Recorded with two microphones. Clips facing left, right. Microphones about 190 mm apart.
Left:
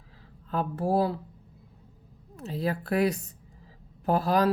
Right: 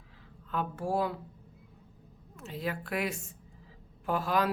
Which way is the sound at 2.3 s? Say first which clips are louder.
Left 6 dB; 35° left (ahead or behind).